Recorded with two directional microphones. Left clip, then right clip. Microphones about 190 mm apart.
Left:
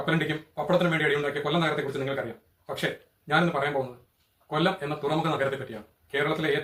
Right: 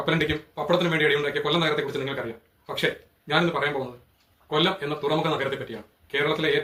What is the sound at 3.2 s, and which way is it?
Speech, 15° left (ahead or behind).